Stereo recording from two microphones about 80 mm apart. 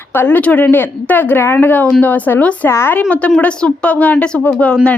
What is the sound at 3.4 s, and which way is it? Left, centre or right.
A woman's voice, centre.